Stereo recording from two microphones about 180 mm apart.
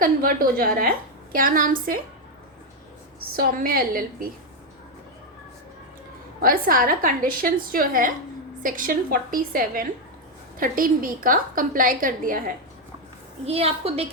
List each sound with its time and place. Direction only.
0.0 s a woman's voice: 50° right (ahead or behind)
3.3 s a woman's voice: 55° right (ahead or behind)
6.4 s a woman's voice: 50° right (ahead or behind)
13.4 s a woman's voice: 35° right (ahead or behind)